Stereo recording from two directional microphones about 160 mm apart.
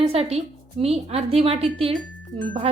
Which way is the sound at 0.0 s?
40° right (ahead or behind).